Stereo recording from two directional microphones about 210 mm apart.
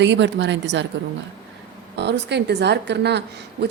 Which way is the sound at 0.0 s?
60° right (ahead or behind).